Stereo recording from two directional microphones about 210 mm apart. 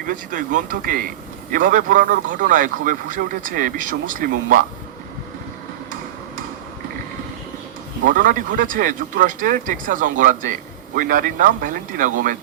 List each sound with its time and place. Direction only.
0.0 s a man's voice: 40° right (ahead or behind)
8.0 s a man's voice: 40° right (ahead or behind)